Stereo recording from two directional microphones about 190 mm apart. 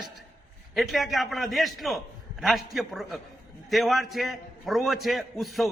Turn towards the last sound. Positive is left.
turn(degrees=0)  # may be behind; listen again after turning